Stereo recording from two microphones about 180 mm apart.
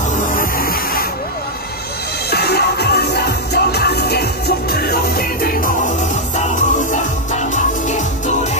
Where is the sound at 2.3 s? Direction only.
65° left (ahead or behind).